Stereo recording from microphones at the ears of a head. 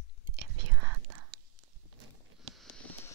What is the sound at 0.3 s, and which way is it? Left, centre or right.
Whispering, right.